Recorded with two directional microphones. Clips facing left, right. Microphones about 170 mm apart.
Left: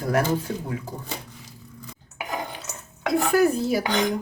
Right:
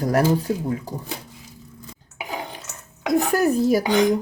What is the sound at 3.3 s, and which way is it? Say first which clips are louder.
Dishes: right 1 dB; 45° right (ahead or behind).